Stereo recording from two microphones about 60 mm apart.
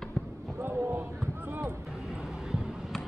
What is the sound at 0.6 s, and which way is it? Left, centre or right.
Basketball bounce, right.